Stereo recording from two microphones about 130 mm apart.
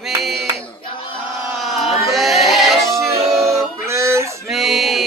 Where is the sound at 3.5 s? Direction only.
20° right (ahead or behind).